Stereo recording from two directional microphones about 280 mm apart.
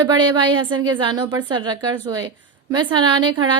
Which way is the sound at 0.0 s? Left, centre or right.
Centre.